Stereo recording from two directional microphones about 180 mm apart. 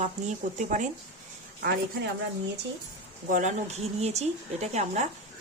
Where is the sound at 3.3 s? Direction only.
45° right (ahead or behind).